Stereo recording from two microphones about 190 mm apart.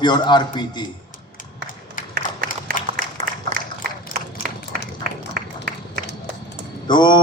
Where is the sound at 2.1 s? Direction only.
60° right (ahead or behind).